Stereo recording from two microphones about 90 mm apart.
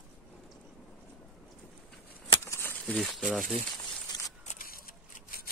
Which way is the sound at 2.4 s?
30° left (ahead or behind).